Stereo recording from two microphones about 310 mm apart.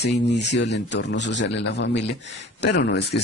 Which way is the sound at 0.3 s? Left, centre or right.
Left.